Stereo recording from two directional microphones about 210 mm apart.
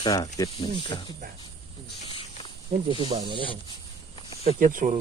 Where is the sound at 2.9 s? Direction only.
25° right (ahead or behind).